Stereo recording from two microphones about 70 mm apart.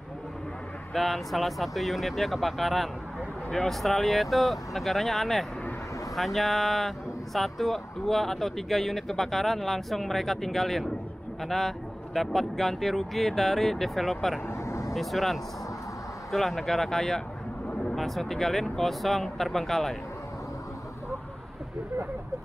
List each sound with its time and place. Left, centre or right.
0.9 s speech: centre
14.5 s vehicle: left
15.0 s speech: centre